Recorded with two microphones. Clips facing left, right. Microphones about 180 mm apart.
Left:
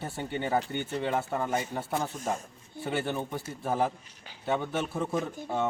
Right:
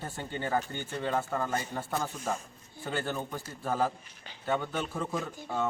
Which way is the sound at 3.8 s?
5° left (ahead or behind).